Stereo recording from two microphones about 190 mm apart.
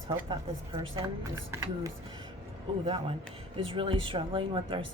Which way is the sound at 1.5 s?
15° right (ahead or behind).